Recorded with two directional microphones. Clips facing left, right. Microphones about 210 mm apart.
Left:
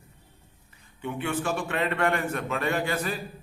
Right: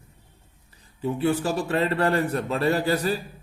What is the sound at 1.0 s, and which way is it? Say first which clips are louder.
A man's voice: right 6 dB; 35° right (ahead or behind).